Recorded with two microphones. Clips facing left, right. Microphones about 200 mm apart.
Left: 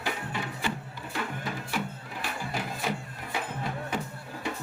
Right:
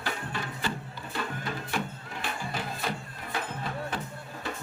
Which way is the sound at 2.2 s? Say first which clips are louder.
Even; 10° left (ahead or behind).